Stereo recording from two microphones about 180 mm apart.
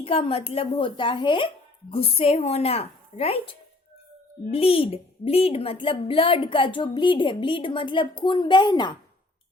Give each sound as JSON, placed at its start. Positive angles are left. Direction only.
{"t": 0.0, "sound": "speech", "side_deg": 30}
{"t": 4.5, "sound": "speech", "side_deg": 35}